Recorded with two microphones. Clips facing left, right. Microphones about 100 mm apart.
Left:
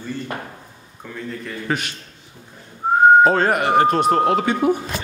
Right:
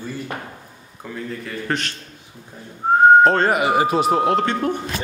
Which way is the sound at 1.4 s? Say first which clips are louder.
Left 1 dB; 5° left (ahead or behind).